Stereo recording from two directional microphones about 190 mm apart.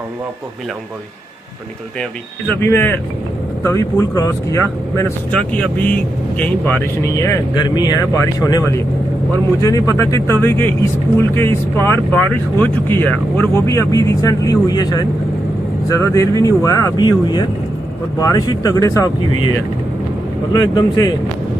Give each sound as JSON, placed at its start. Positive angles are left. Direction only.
{"t": 2.0, "sound": "speech", "side_deg": 10}
{"t": 20.7, "sound": "speech", "side_deg": 20}